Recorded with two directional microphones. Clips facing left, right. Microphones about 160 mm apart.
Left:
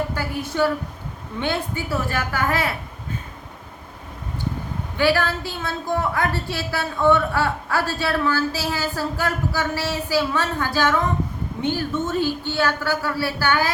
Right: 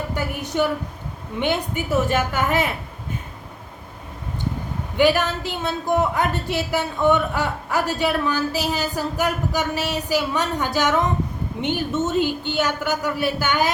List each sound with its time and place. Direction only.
0.1 s speech: 15° right (ahead or behind)
4.9 s speech: 20° right (ahead or behind)